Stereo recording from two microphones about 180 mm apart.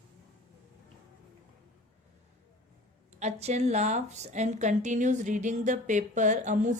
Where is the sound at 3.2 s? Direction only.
35° right (ahead or behind).